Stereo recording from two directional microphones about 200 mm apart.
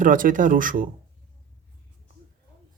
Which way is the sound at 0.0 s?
40° right (ahead or behind).